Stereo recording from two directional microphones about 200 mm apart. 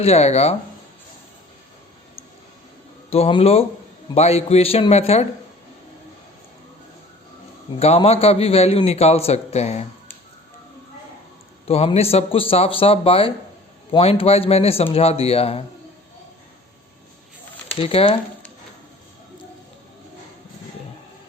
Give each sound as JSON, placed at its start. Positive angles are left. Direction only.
{"t": 0.0, "sound": "a man's voice", "side_deg": 30}
{"t": 3.1, "sound": "a man's voice", "side_deg": 30}
{"t": 7.8, "sound": "a man's voice", "side_deg": 30}
{"t": 11.7, "sound": "speech", "side_deg": 30}
{"t": 17.7, "sound": "speech", "side_deg": 25}